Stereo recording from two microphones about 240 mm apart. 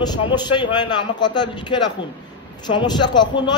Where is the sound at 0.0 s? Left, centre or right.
Centre.